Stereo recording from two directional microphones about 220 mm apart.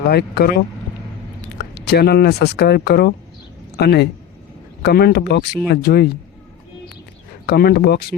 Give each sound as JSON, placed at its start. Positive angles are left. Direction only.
{"t": 0.0, "sound": "speech", "side_deg": 45}
{"t": 1.5, "sound": "speech", "side_deg": 45}
{"t": 7.4, "sound": "speech", "side_deg": 45}